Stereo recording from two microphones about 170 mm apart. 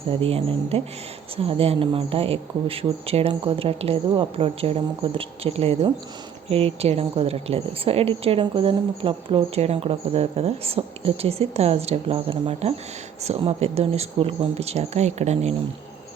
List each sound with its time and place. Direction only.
0.1 s a woman's voice: 35° right (ahead or behind)